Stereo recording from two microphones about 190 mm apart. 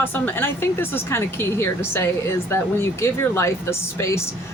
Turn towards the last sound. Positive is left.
turn(degrees=15)  # may be behind; listen again after turning